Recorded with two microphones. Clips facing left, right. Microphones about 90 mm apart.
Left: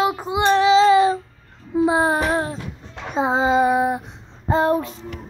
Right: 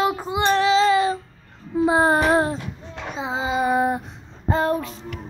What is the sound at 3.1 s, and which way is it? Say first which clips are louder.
Child singing: left 7 dB; 40° left (ahead or behind).